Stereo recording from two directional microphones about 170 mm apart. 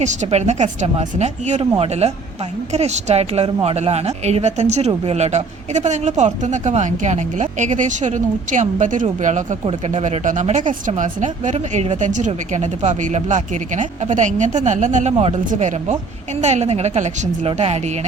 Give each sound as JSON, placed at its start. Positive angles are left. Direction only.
{"t": 0.0, "sound": "a woman's voice", "side_deg": -45}